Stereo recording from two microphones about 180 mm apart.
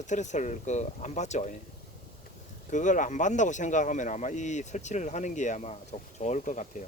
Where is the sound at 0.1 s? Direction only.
40° left (ahead or behind).